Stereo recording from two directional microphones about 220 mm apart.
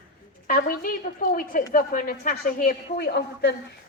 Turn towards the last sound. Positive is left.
turn(degrees=45)  # may be behind; listen again after turning